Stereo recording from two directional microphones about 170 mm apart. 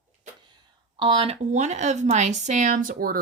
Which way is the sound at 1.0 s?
30° right (ahead or behind).